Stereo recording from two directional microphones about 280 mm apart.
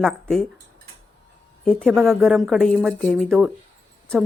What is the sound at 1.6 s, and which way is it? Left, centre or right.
Speech, centre.